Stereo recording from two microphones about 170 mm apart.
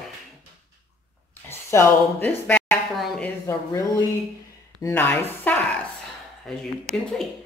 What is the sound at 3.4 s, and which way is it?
Speech, 15° left (ahead or behind).